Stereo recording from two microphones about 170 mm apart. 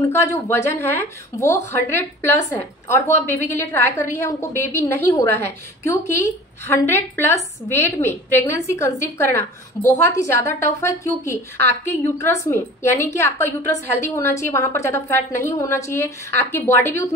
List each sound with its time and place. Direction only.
0.0 s speech: 15° left (ahead or behind)